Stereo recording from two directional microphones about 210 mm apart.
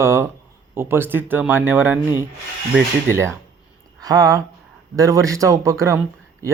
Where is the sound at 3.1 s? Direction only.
10° right (ahead or behind).